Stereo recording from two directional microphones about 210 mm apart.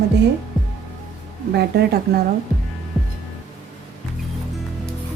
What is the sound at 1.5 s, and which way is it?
Speech, 50° right (ahead or behind).